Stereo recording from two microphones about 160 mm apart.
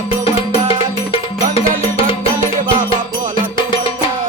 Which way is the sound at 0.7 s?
35° left (ahead or behind).